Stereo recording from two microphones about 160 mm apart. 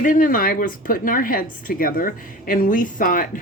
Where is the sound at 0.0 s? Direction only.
55° left (ahead or behind).